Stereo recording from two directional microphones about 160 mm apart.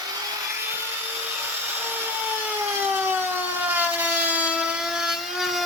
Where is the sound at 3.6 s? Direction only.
10° right (ahead or behind).